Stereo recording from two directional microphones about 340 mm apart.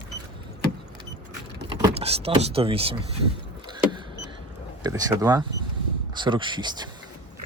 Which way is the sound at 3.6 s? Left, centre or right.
Centre.